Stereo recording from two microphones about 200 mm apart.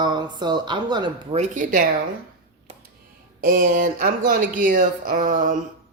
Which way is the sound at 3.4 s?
45° right (ahead or behind).